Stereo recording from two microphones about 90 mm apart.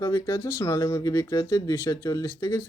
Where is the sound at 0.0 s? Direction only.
40° left (ahead or behind).